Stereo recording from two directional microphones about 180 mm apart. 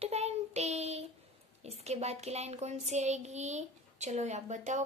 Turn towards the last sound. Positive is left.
turn(degrees=-40)  # may be behind; listen again after turning